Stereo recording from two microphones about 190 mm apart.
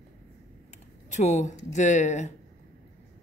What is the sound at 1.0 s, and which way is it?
Speech, 40° left (ahead or behind).